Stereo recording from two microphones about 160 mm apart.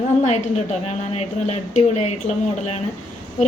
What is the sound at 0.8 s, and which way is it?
Speech, 45° left (ahead or behind).